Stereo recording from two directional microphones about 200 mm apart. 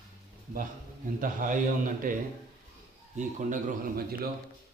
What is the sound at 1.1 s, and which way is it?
A man's voice, 45° right (ahead or behind).